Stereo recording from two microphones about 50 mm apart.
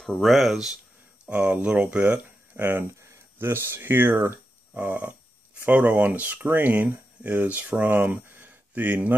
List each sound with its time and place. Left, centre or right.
0.2 s speech: centre
1.3 s speech: right
3.3 s speech: right
4.7 s speech: right